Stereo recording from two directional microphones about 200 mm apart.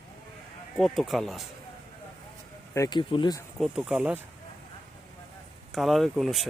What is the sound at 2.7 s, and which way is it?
Speech, 20° left (ahead or behind).